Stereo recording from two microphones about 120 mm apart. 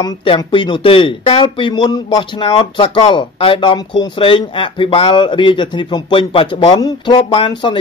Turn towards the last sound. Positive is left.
turn(degrees=45)  # may be behind; listen again after turning